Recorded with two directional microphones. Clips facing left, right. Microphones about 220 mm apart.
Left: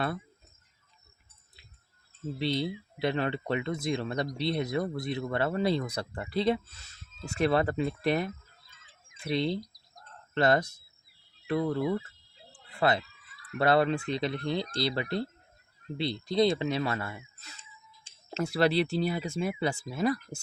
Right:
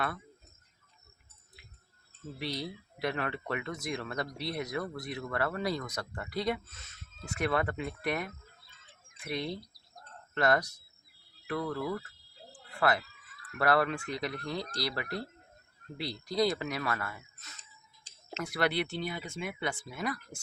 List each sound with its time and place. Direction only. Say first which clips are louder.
2.4 s speech: left 7 dB; 25° left (ahead or behind)